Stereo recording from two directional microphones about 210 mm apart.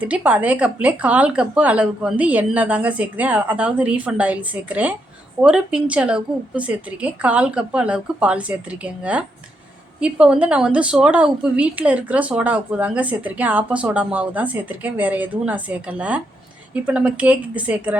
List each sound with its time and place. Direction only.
0.0 s a woman's voice: 5° right (ahead or behind)